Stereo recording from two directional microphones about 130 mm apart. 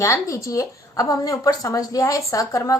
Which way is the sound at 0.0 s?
25° left (ahead or behind).